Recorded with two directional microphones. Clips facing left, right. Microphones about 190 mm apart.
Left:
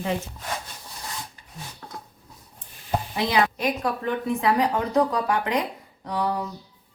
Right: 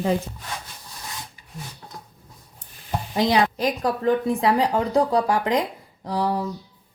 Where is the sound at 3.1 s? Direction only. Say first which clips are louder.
Right 4 dB; 35° right (ahead or behind).